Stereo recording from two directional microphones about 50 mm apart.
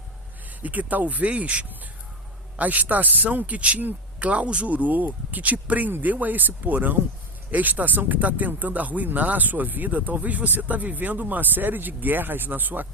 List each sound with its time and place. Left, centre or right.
0.6 s speech: right